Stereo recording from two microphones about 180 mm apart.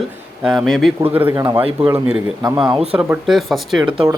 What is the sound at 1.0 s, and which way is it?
Speech, 10° right (ahead or behind).